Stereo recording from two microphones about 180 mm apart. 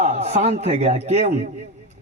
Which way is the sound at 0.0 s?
35° right (ahead or behind).